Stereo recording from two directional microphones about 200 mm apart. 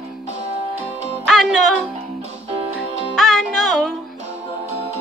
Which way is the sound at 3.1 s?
Centre (ahead or behind).